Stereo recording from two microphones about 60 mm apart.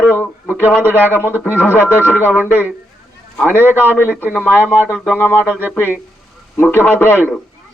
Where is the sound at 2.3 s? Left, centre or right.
Right.